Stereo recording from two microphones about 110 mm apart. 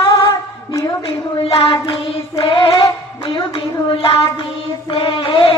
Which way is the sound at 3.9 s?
55° left (ahead or behind).